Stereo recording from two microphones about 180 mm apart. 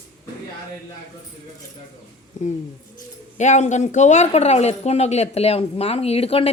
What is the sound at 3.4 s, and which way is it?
Speech, 40° left (ahead or behind).